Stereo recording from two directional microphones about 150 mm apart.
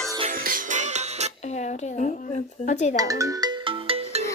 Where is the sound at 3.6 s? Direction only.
35° right (ahead or behind).